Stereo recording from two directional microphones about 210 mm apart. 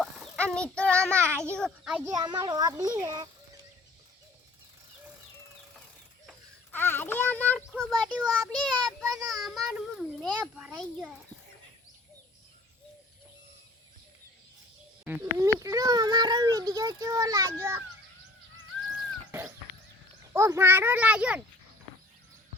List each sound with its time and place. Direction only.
0.0 s a sound: 5° left (ahead or behind)
1.1 s a child's voice: 10° right (ahead or behind)
1.5 s a child's voice: 5° left (ahead or behind)
2.1 s a child's voice: 20° right (ahead or behind)
6.2 s a child's voice: 10° left (ahead or behind)
15.0 s a child's voice: 10° right (ahead or behind)
19.3 s a sound: 15° right (ahead or behind)
20.3 s a child's voice: 10° right (ahead or behind)